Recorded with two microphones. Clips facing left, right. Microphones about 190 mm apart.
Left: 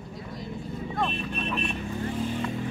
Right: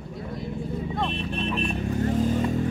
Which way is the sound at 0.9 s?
25° right (ahead or behind).